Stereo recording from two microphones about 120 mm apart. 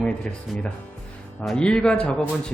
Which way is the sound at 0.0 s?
10° left (ahead or behind).